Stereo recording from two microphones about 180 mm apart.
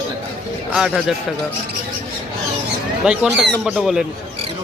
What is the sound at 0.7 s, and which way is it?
Speech, centre (ahead or behind).